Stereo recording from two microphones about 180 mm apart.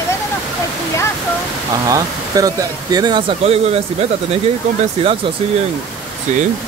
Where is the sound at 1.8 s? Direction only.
20° right (ahead or behind); by 4.0 s 35° right (ahead or behind).